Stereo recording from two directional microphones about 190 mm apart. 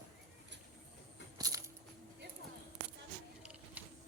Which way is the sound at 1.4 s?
15° right (ahead or behind).